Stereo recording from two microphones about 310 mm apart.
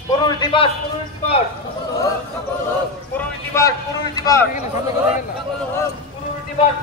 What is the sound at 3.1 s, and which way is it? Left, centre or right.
A man's voice, centre.